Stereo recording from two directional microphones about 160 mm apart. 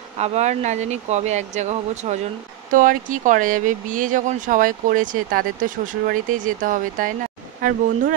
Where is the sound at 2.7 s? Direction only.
55° right (ahead or behind).